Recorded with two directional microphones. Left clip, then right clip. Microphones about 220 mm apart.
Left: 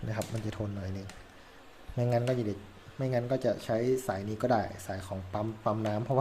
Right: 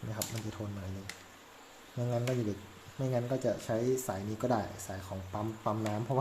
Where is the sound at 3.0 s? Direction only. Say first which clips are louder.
Left 3 dB; centre (ahead or behind).